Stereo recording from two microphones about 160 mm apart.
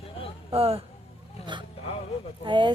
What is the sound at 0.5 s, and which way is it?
Speech, 40° right (ahead or behind).